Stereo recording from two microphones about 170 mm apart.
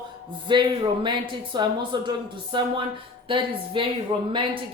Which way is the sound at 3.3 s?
30° right (ahead or behind).